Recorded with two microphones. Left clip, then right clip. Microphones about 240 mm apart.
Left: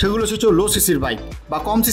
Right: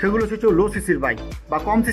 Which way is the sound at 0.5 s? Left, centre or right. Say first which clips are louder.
Left 2 dB; left.